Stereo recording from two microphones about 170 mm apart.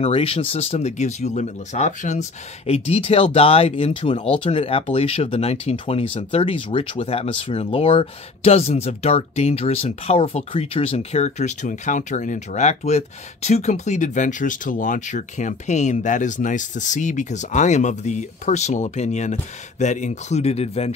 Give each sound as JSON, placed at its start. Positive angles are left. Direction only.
{"t": 0.0, "sound": "speech", "side_deg": 35}